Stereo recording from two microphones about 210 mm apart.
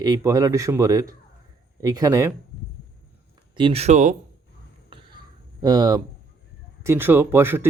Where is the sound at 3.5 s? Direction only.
25° right (ahead or behind).